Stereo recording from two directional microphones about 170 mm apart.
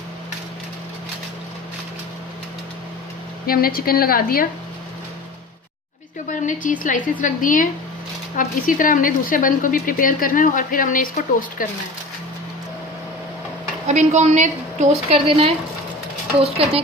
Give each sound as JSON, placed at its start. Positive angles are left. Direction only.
{"t": 3.4, "sound": "a woman's voice", "side_deg": 60}
{"t": 6.2, "sound": "speech", "side_deg": 50}
{"t": 13.8, "sound": "a woman's voice", "side_deg": -45}